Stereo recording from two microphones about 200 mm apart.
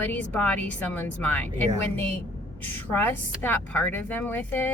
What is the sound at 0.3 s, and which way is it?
Speech, 5° left (ahead or behind).